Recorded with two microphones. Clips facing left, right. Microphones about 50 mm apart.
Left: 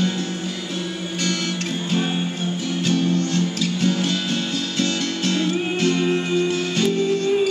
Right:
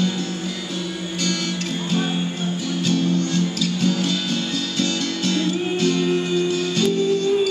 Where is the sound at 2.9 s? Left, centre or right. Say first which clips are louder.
Even; left.